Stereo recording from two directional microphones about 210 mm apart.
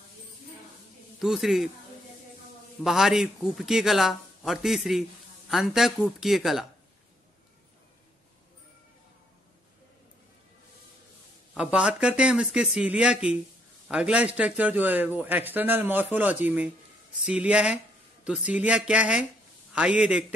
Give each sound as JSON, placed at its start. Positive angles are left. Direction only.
{"t": 1.2, "sound": "a man's voice", "side_deg": 0}
{"t": 2.8, "sound": "a man's voice", "side_deg": 0}
{"t": 11.5, "sound": "a man's voice", "side_deg": -5}